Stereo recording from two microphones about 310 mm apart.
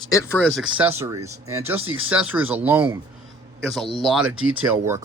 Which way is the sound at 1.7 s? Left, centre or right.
Right.